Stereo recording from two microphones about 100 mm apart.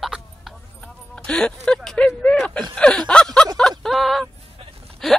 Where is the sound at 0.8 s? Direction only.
10° left (ahead or behind).